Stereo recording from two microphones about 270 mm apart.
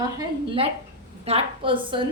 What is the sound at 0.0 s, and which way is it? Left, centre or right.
A woman's voice, centre.